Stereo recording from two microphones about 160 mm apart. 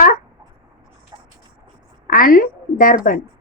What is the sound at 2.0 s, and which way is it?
Speech, 60° left (ahead or behind).